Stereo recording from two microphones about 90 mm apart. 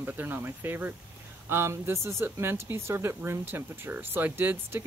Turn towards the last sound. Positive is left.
turn(degrees=-25)  # may be behind; listen again after turning